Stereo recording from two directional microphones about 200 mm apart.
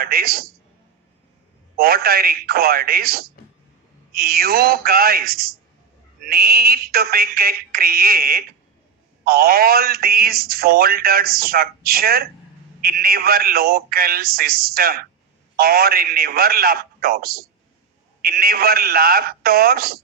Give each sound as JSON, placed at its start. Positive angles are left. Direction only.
{"t": 0.0, "sound": "speech", "side_deg": -50}
{"t": 1.7, "sound": "speech", "side_deg": -50}